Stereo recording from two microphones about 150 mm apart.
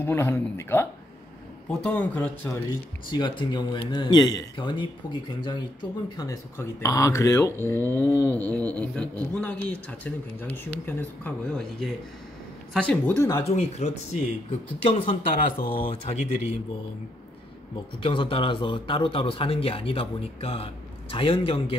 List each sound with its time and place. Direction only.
0.0 s speech: 15° left (ahead or behind)
1.7 s speech: 5° left (ahead or behind)
3.1 s a man's voice: 30° left (ahead or behind)
6.2 s speech: 20° left (ahead or behind)
13.3 s speech: 40° left (ahead or behind)
15.0 s speech: 70° left (ahead or behind)
15.9 s speech: 45° left (ahead or behind)
18.0 s a man's voice: 35° left (ahead or behind)